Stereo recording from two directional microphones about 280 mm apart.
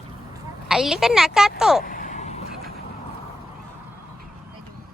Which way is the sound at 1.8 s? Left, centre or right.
Left.